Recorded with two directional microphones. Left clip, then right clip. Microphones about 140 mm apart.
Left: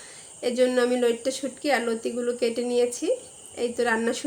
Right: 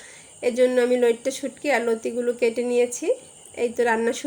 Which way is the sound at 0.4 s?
20° right (ahead or behind).